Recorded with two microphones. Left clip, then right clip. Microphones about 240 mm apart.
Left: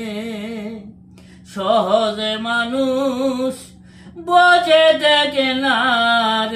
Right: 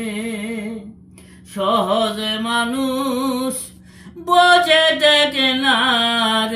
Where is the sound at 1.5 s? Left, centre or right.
Centre.